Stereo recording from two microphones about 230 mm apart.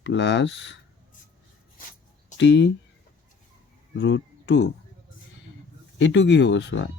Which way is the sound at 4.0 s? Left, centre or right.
Left.